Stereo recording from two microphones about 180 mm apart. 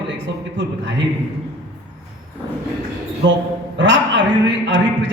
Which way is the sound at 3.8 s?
85° right.